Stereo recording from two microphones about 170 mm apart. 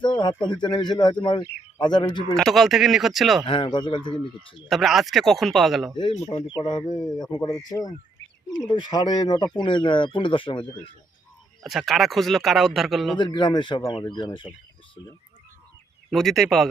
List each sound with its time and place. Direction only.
0.0 s a man's voice: 25° left (ahead or behind)
2.3 s a man's voice: centre (ahead or behind)
3.4 s a man's voice: 30° left (ahead or behind)
4.7 s a man's voice: centre (ahead or behind)
6.0 s a man's voice: 25° left (ahead or behind)
11.6 s a man's voice: centre (ahead or behind)
13.1 s a man's voice: 25° left (ahead or behind)
16.0 s a man's voice: centre (ahead or behind)